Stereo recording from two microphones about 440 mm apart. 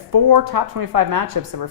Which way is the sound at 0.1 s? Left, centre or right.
Right.